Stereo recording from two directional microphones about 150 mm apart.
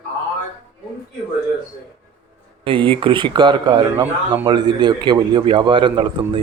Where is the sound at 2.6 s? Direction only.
35° right (ahead or behind).